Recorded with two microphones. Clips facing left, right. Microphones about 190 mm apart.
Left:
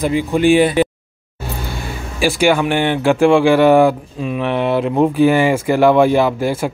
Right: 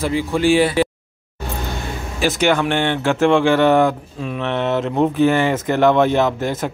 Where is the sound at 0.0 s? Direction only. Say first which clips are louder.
Left 3 dB; 15° left (ahead or behind).